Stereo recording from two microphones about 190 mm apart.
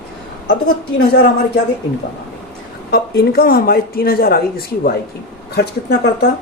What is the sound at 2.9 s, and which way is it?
Speech, 55° left (ahead or behind).